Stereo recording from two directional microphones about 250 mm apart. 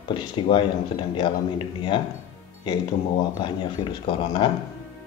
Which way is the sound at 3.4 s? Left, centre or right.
Centre.